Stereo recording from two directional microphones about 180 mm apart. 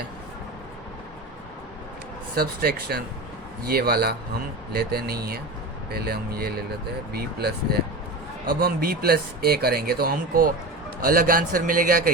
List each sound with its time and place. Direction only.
2.3 s speech: 55° right (ahead or behind)